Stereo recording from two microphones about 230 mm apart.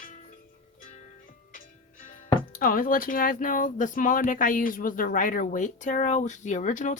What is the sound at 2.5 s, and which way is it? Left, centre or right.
Speech, left.